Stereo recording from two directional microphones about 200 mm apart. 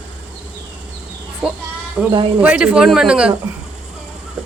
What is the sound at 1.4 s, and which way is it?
Speech, 5° right (ahead or behind).